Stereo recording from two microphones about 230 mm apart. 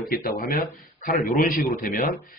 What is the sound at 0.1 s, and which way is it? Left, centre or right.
Speech, left.